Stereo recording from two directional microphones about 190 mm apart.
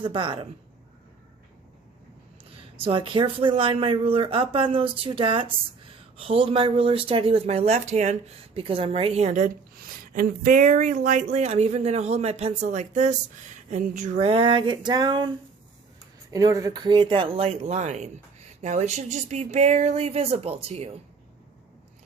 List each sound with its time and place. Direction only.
0.0 s speech: 25° right (ahead or behind)
2.7 s a woman's voice: 30° right (ahead or behind)
16.3 s a woman's voice: 20° right (ahead or behind)